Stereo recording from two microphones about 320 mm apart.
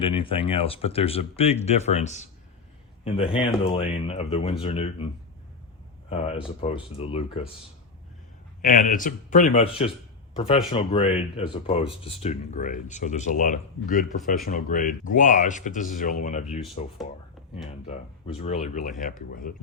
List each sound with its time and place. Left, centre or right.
0.0 s a man's voice: centre
6.1 s speech: centre
8.6 s speech: left